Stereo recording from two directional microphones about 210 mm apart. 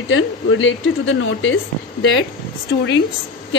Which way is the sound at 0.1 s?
70° left (ahead or behind).